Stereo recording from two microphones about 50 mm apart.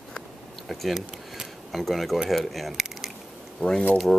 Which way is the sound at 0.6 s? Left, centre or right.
Centre.